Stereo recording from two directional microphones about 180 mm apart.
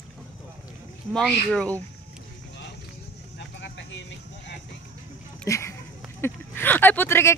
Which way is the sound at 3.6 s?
80° left.